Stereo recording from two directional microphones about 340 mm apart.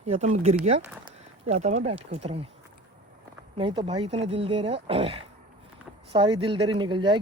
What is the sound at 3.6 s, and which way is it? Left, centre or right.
Speech, centre.